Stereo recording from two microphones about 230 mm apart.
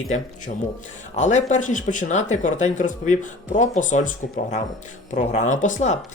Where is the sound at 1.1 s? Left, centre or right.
Left.